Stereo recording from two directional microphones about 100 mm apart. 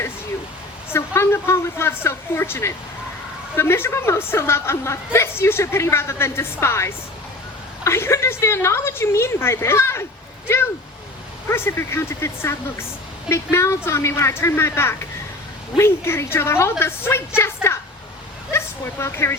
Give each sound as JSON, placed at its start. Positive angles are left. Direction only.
{"t": 0.9, "sound": "a woman's voice", "side_deg": 25}
{"t": 11.4, "sound": "a woman's voice", "side_deg": 25}